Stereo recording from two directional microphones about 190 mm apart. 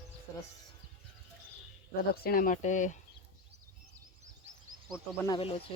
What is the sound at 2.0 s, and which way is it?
Speech, 50° left (ahead or behind).